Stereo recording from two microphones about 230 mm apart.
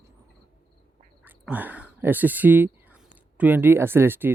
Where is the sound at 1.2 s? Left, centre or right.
Centre.